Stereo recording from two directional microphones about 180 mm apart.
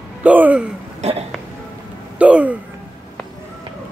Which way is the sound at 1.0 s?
40° right (ahead or behind).